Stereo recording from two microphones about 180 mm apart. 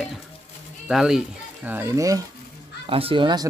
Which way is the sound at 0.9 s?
5° right (ahead or behind).